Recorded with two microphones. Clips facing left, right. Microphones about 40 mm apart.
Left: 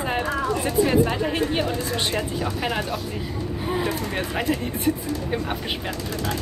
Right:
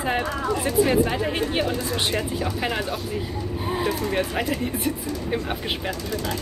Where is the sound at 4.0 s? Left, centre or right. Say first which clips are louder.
Right 2 dB; centre.